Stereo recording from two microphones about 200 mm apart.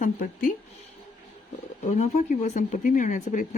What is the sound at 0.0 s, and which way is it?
Speech, 45° left (ahead or behind).